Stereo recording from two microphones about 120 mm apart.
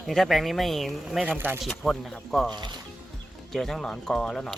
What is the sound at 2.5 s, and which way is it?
Speech, 35° right (ahead or behind).